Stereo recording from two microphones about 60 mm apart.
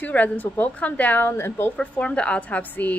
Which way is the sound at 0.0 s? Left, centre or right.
Left.